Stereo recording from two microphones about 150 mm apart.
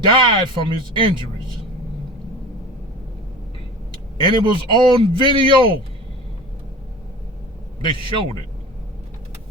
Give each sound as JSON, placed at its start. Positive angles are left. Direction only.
{"t": 0.0, "sound": "a man's voice", "side_deg": -35}
{"t": 4.2, "sound": "a man's voice", "side_deg": -30}